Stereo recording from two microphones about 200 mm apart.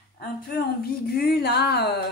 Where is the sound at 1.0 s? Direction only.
50° left (ahead or behind).